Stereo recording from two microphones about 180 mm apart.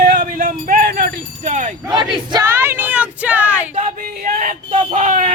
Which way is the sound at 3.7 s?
45° right (ahead or behind).